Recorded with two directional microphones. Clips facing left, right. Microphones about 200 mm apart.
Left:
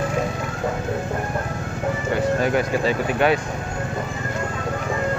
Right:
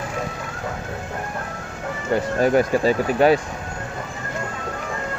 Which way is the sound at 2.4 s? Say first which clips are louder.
Right 3 dB; 40° right (ahead or behind).